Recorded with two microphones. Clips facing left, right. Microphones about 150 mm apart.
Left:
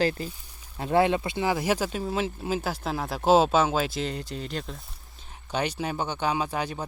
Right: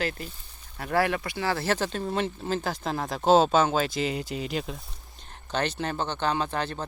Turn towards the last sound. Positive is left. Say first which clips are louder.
# even
turn(degrees=10)  # may be behind; listen again after turning